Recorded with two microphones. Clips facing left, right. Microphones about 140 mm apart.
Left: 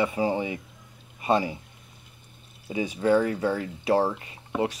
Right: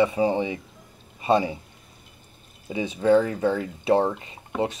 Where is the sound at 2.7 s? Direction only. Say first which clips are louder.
Right 3 dB; 25° right (ahead or behind).